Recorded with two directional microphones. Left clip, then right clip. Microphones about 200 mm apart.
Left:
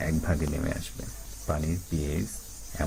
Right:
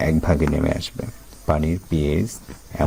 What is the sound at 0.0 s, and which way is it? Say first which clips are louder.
Speech: right 11 dB; 50° right (ahead or behind).